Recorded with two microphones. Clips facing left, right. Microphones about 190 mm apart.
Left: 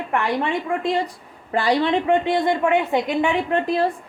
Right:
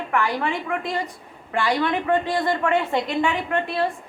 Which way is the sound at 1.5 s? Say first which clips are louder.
Left 3 dB; 35° left (ahead or behind).